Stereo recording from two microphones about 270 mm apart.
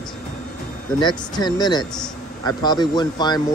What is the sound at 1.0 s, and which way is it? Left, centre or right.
Speech, centre.